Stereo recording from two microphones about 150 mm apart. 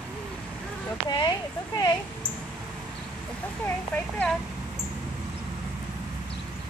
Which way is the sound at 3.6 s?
10° left (ahead or behind).